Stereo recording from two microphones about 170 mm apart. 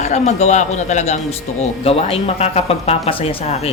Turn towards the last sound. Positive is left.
turn(degrees=35)  # may be behind; listen again after turning